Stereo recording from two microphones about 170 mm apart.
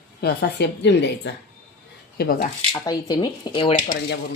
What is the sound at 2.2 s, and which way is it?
Speech, 65° left (ahead or behind).